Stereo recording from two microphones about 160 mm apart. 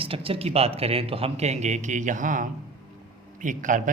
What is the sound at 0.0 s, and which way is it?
Speech, 35° right (ahead or behind).